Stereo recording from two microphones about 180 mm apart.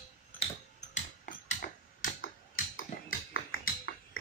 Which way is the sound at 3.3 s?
60° left (ahead or behind).